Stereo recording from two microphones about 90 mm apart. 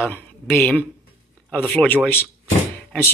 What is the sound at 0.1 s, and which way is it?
Speech, 20° left (ahead or behind).